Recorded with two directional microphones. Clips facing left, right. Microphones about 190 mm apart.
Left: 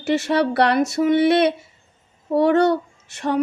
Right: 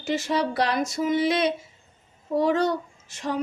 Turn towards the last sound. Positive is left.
turn(degrees=65)  # may be behind; listen again after turning